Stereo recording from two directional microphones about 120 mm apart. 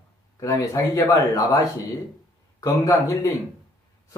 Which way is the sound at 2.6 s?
30° left (ahead or behind).